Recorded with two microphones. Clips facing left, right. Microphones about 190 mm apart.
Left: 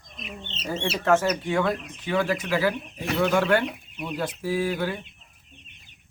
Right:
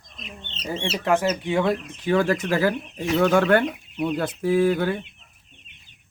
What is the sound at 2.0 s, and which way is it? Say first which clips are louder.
Speech: right 4 dB; 45° right (ahead or behind).